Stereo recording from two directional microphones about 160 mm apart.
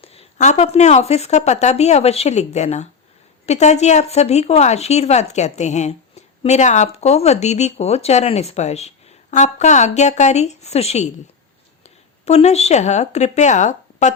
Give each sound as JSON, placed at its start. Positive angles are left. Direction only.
{"t": 0.0, "sound": "speech", "side_deg": 40}
{"t": 12.2, "sound": "speech", "side_deg": 40}